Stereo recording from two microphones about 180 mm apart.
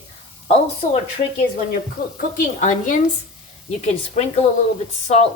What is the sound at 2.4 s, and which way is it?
Speech, 45° left (ahead or behind).